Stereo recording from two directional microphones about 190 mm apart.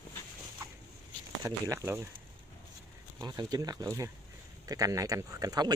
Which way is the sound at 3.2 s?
20° right (ahead or behind).